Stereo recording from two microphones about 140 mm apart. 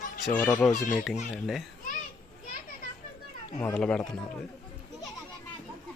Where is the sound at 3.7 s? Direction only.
5° left (ahead or behind).